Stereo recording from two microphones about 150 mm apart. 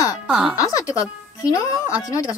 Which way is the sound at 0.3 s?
5° right (ahead or behind).